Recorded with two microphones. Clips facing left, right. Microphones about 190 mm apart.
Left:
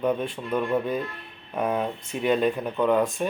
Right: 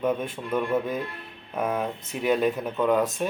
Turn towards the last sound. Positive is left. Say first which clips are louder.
# left 1 dB
turn(degrees=0)  # may be behind; listen again after turning